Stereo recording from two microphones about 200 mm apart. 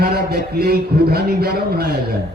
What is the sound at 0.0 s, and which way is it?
A man's voice, 55° right (ahead or behind).